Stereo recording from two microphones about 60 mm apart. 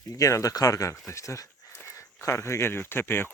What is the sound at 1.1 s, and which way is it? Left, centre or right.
Speech, left.